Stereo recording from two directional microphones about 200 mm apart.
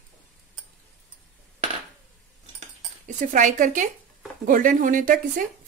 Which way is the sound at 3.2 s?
40° right (ahead or behind).